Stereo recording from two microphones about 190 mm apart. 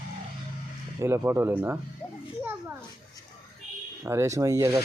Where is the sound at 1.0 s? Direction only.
15° right (ahead or behind).